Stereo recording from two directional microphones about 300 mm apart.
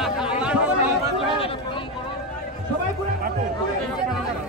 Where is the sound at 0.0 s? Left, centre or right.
Centre.